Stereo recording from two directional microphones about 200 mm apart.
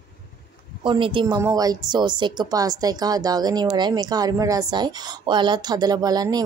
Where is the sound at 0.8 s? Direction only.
25° right (ahead or behind).